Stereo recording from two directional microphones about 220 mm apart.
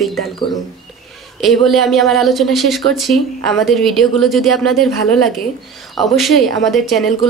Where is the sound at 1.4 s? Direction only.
Centre (ahead or behind).